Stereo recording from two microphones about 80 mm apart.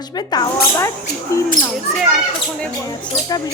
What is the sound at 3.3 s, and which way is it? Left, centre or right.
Speech, left.